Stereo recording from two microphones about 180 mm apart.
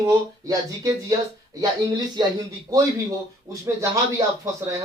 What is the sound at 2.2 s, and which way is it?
Speech, 25° right (ahead or behind).